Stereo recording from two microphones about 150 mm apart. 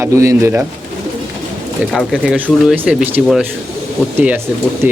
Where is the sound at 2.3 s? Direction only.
10° right (ahead or behind).